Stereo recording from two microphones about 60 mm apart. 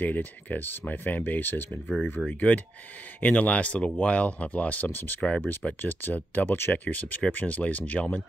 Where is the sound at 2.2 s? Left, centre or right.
Right.